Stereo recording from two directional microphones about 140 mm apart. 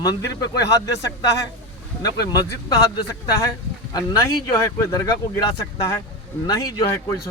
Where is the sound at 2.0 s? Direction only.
25° left (ahead or behind).